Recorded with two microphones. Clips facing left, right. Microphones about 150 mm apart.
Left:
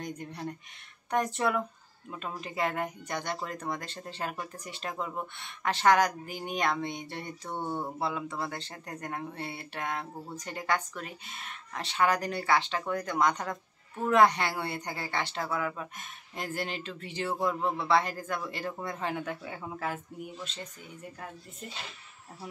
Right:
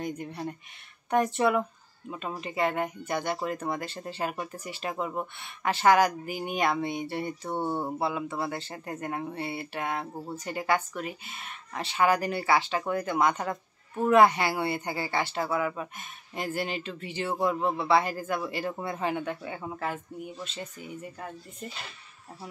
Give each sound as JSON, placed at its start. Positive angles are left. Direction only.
{"t": 0.0, "sound": "a woman's voice", "side_deg": -5}
{"t": 7.5, "sound": "speech", "side_deg": -30}
{"t": 8.0, "sound": "a woman's voice", "side_deg": -5}